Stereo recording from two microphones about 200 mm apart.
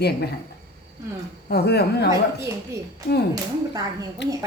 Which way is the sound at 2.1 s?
15° right (ahead or behind).